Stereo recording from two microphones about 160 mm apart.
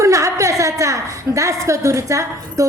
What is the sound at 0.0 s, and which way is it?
A woman's voice, 20° right (ahead or behind).